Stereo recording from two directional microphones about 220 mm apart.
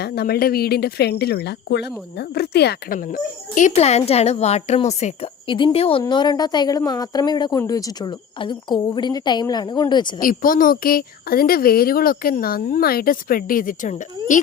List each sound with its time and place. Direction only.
0.0 s a woman's voice: 45° left (ahead or behind); by 10.2 s 20° left (ahead or behind)
10.2 s speech: 40° left (ahead or behind)